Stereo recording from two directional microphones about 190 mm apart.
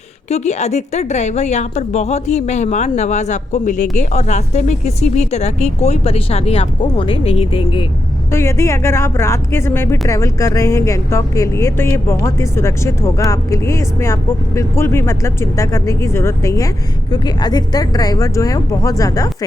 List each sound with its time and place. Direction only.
0.3 s a woman's voice: 35° left (ahead or behind)
8.3 s speech: 15° left (ahead or behind)